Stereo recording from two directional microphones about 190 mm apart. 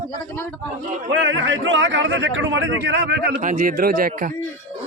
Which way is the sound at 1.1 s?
80° right.